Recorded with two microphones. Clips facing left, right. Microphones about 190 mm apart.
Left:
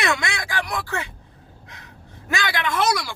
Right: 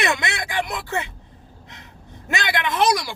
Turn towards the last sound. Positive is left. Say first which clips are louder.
# right 2 dB
turn(degrees=-15)  # may be behind; listen again after turning